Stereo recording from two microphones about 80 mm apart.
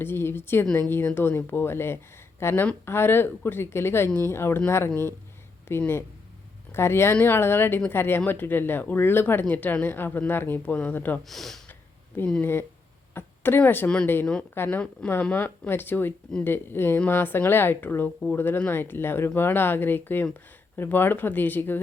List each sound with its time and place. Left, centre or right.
0.0 s speech: left
11.2 s speech: centre
11.7 s a sound: left
12.4 s speech: left
15.0 s speech: centre
15.4 s speech: left